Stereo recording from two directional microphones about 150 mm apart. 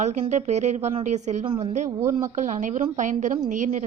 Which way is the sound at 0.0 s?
50° right (ahead or behind).